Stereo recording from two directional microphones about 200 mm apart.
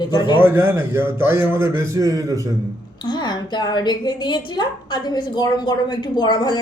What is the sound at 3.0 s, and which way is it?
A woman's voice, 20° left (ahead or behind).